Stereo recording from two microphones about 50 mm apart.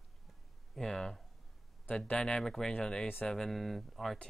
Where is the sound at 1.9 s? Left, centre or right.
Left.